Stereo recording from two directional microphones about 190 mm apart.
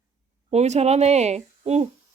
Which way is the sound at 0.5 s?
35° right (ahead or behind).